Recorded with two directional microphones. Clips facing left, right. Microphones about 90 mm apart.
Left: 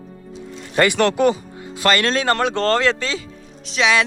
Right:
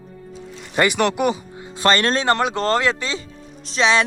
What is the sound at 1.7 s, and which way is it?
Speech, 30° right (ahead or behind).